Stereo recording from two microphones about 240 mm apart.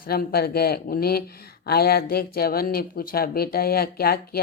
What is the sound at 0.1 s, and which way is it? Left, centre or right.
Speech, left.